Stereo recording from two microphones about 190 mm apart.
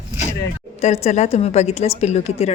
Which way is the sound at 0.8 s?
35° left (ahead or behind).